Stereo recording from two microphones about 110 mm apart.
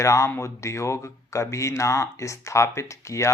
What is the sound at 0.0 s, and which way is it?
Speech, 25° left (ahead or behind).